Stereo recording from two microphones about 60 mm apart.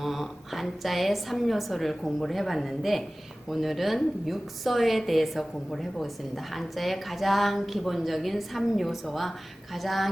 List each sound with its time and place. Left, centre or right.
0.0 s a woman's voice: centre